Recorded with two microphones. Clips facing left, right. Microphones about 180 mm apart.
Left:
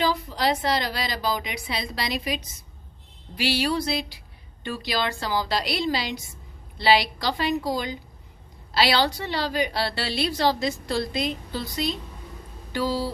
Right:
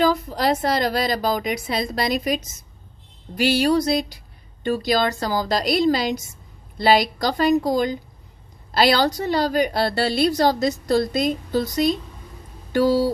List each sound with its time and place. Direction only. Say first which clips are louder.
0.0 s a woman's voice: right 5 dB; 45° right (ahead or behind)